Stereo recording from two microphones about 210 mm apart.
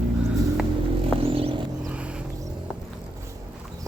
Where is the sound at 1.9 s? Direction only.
5° right (ahead or behind).